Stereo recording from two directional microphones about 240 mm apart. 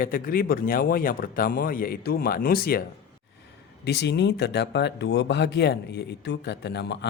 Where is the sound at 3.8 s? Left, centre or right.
Left.